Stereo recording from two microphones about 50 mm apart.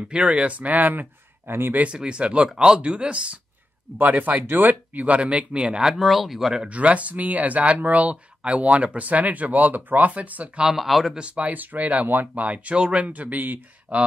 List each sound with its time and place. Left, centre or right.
0.1 s speech: right
1.5 s speech: right
1.8 s speech: right
2.5 s speech: centre
4.0 s speech: right
5.9 s speech: centre
6.7 s speech: right
10.7 s speech: centre
11.1 s speech: right